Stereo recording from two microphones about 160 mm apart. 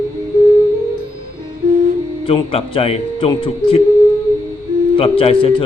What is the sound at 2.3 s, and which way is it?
Speech, 35° left (ahead or behind).